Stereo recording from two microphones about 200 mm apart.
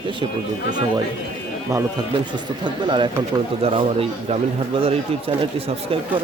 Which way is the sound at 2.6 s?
25° right (ahead or behind).